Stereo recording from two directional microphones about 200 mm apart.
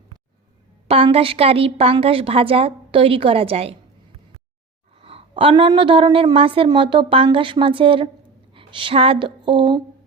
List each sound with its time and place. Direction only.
0.9 s a woman's voice: 30° right (ahead or behind)
4.9 s a woman's voice: 30° right (ahead or behind)